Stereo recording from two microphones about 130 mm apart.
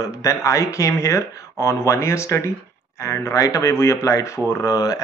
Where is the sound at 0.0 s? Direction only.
25° left (ahead or behind).